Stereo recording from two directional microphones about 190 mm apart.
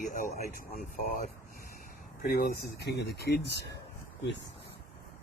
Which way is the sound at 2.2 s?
50° left (ahead or behind).